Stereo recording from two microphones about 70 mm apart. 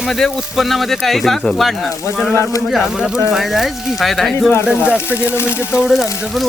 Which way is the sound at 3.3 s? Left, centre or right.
Centre.